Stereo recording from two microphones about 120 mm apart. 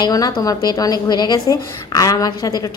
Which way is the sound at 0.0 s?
30° left (ahead or behind).